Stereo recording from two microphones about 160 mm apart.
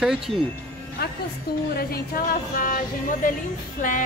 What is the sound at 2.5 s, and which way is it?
Speech, 60° left (ahead or behind).